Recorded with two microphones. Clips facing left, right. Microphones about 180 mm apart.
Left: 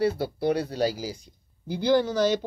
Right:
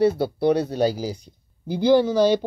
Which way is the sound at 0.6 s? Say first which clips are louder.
Right 5 dB; 25° right (ahead or behind).